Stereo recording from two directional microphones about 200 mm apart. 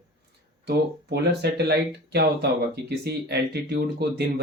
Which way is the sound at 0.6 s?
55° right (ahead or behind).